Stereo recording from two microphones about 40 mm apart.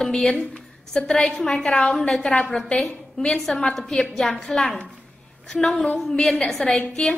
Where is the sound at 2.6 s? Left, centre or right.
Centre.